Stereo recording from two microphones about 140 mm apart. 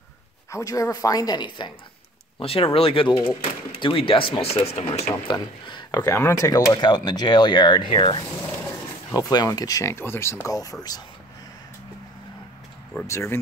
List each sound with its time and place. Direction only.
0.5 s speech: 25° left (ahead or behind)
2.3 s speech: 45° left (ahead or behind)
5.3 s speech: 30° left (ahead or behind)
13.0 s speech: 20° left (ahead or behind)